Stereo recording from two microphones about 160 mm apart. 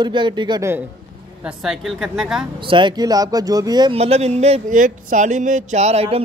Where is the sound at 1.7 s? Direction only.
Centre (ahead or behind).